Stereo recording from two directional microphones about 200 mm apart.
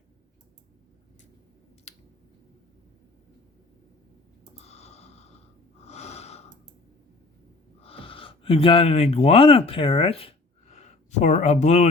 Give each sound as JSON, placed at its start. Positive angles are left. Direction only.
{"t": 1.9, "sound": "a sound", "side_deg": 35}
{"t": 4.6, "sound": "sniff", "side_deg": 30}
{"t": 5.8, "sound": "snort", "side_deg": 35}
{"t": 7.8, "sound": "speech", "side_deg": 30}